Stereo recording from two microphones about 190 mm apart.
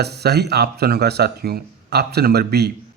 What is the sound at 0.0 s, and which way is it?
A man's voice, 60° right (ahead or behind).